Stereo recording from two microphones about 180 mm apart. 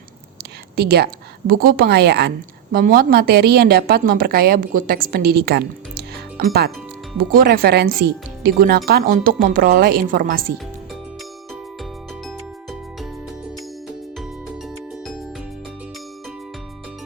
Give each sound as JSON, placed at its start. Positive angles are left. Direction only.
{"t": 0.8, "sound": "a woman's voice", "side_deg": -60}
{"t": 2.7, "sound": "a woman's voice", "side_deg": -55}